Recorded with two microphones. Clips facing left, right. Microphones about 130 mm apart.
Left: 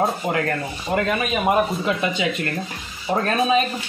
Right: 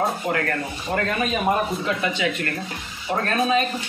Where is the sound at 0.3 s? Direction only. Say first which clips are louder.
Left 1 dB; 15° left (ahead or behind).